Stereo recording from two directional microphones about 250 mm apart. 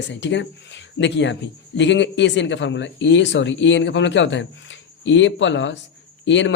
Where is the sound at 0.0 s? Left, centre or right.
Left.